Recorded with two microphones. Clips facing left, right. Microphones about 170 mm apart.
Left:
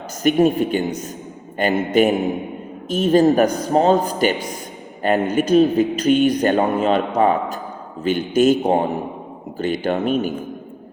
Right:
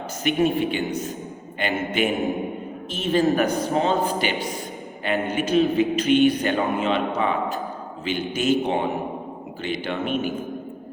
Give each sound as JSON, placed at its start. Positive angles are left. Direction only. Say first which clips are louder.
{"t": 0.2, "sound": "a man's voice", "louder": "left 5 dB", "side_deg": 40}